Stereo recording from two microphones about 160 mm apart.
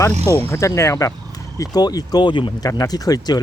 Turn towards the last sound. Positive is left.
turn(degrees=25)  # may be behind; listen again after turning